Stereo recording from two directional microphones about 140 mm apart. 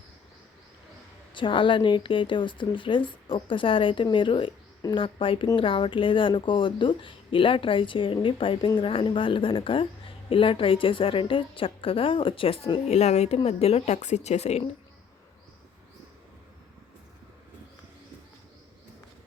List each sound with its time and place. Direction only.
1.3 s a woman's voice: 35° left (ahead or behind)